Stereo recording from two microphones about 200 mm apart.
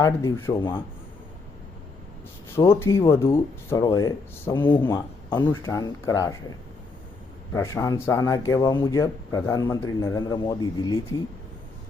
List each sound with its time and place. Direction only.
0.0 s a man's voice: 15° left (ahead or behind)
2.6 s a man's voice: 15° left (ahead or behind)
7.5 s a man's voice: 15° left (ahead or behind)